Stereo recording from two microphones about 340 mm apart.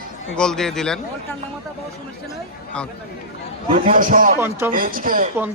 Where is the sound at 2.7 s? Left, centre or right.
Centre.